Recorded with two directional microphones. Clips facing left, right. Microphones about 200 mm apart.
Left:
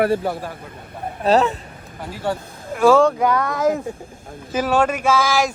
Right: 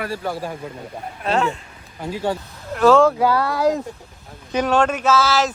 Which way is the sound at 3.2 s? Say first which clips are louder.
Right 1 dB; 30° right (ahead or behind).